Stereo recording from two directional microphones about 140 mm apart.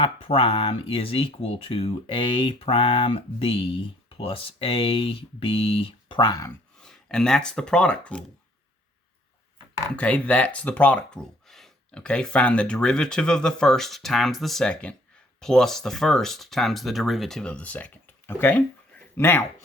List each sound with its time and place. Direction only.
0.0 s speech: 45° left (ahead or behind)
6.7 s speech: 5° left (ahead or behind)
9.7 s speech: 10° left (ahead or behind)